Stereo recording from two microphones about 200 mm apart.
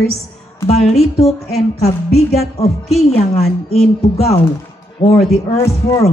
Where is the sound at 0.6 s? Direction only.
35° left (ahead or behind).